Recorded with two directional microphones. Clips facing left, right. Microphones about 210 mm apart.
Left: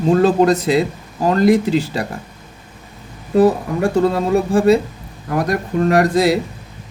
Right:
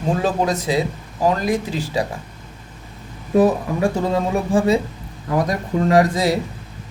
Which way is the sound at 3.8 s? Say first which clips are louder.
Left 5 dB; 70° left (ahead or behind).